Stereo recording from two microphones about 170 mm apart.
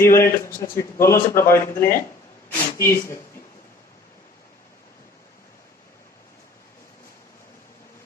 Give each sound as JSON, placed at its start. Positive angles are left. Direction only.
{"t": 0.0, "sound": "a man's voice", "side_deg": 15}